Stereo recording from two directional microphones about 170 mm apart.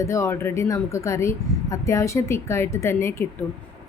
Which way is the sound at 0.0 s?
15° left (ahead or behind).